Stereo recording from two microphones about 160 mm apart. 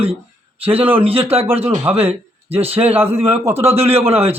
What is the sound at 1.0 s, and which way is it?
Speech, 35° right (ahead or behind).